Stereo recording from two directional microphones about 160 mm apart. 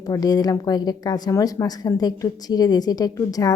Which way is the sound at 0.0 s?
25° left (ahead or behind).